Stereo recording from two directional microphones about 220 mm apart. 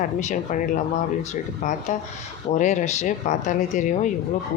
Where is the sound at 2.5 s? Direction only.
35° left (ahead or behind).